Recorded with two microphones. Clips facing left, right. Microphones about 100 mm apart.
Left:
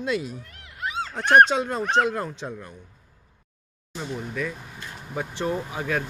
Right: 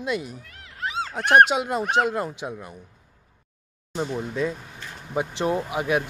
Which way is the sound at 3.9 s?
25° right (ahead or behind).